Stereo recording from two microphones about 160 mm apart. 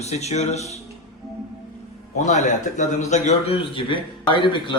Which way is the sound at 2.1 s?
45° left (ahead or behind).